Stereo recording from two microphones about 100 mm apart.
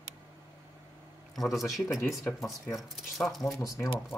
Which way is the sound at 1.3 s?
Centre (ahead or behind).